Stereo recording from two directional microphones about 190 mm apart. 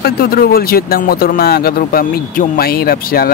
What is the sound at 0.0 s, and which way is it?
Speech, 50° left (ahead or behind).